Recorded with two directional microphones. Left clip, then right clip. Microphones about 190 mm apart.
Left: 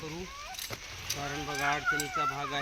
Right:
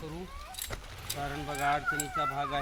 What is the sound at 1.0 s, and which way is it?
Speech, 25° right (ahead or behind).